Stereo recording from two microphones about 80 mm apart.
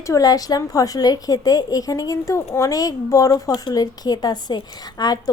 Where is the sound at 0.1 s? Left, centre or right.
Left.